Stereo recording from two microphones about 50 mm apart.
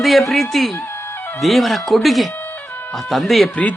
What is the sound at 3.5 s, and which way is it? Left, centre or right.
Speech, left.